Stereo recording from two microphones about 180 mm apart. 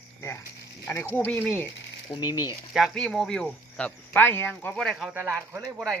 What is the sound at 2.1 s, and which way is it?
Speech, 25° left (ahead or behind).